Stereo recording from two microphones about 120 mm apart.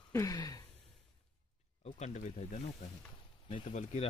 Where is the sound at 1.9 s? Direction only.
80° left.